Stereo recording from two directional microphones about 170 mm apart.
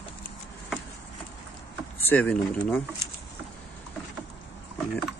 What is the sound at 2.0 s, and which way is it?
Speech, 5° left (ahead or behind).